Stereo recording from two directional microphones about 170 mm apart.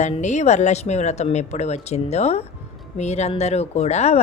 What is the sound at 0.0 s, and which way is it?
Speech, 45° left (ahead or behind).